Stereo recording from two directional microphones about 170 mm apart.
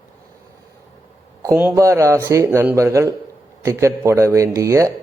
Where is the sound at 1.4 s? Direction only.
15° right (ahead or behind).